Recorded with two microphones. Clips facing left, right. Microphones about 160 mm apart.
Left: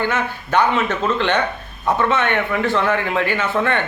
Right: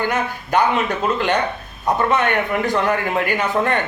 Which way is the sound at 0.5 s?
15° right (ahead or behind).